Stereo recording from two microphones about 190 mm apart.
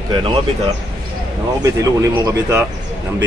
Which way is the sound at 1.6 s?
20° right (ahead or behind).